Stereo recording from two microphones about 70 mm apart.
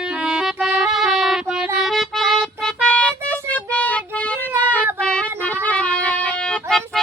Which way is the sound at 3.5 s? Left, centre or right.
Left.